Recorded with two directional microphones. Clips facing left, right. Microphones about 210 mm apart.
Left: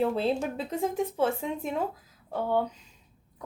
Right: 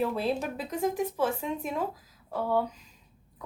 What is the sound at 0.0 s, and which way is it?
Speech, 25° left (ahead or behind).